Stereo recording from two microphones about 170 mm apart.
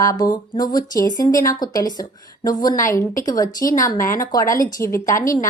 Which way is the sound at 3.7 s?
50° left (ahead or behind).